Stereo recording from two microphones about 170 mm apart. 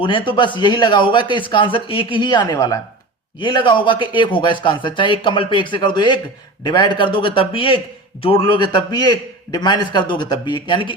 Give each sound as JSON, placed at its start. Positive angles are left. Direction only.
{"t": 0.0, "sound": "speech", "side_deg": 30}